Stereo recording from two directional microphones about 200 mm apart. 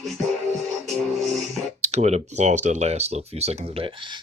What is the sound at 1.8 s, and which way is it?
Speech, 35° right (ahead or behind).